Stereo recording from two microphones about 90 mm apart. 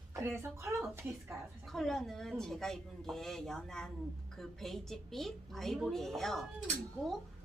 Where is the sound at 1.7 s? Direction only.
5° left (ahead or behind).